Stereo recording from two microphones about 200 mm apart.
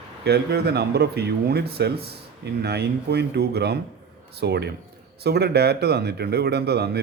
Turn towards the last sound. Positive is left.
turn(degrees=-55)  # may be behind; listen again after turning